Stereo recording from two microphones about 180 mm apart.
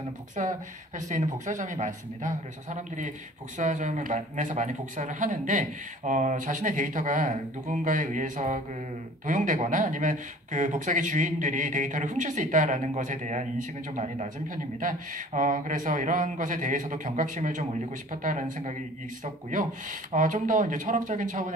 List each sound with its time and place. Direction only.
0.4 s speech: 45° right (ahead or behind)